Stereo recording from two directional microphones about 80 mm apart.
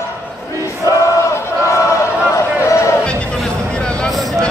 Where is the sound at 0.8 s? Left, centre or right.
Left.